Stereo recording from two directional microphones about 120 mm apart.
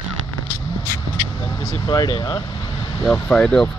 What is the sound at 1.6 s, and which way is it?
Speech, 35° left (ahead or behind).